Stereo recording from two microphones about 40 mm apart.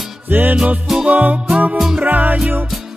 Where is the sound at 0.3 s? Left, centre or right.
Right.